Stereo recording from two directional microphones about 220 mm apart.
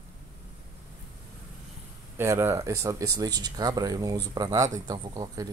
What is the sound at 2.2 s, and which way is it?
Speech, 10° right (ahead or behind).